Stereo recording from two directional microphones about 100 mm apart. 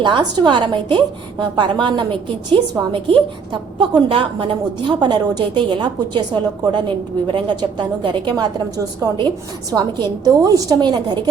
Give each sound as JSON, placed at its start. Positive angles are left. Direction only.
{"t": 0.0, "sound": "a woman's voice", "side_deg": -45}